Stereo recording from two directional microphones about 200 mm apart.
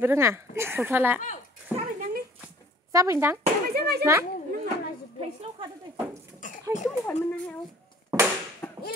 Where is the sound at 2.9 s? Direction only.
15° right (ahead or behind).